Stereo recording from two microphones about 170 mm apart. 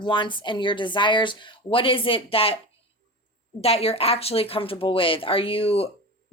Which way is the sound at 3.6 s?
35° left (ahead or behind).